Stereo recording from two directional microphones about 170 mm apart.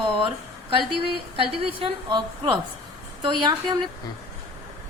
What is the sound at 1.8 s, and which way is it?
A woman's voice, 25° right (ahead or behind).